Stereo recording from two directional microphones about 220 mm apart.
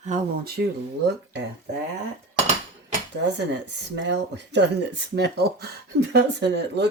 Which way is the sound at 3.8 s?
50° right (ahead or behind).